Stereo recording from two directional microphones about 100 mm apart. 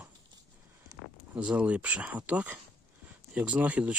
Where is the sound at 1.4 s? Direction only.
10° right (ahead or behind).